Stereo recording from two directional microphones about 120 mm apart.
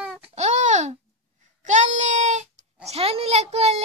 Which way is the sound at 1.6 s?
90° right.